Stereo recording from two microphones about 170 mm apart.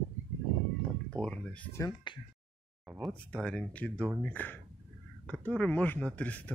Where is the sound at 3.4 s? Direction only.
5° left (ahead or behind).